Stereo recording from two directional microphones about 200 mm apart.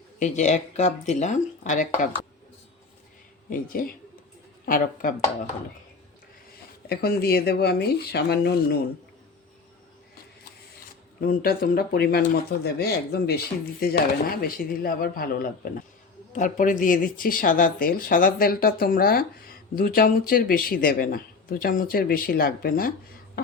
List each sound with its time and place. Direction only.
0.2 s speech: 35° left (ahead or behind)
3.5 s speech: 45° left (ahead or behind)
6.8 s speech: 50° left (ahead or behind)
11.2 s speech: 50° left (ahead or behind)